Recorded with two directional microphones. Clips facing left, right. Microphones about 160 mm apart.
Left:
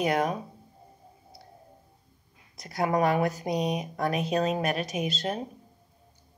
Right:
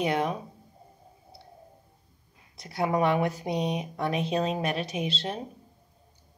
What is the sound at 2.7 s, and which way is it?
Speech, 40° left (ahead or behind).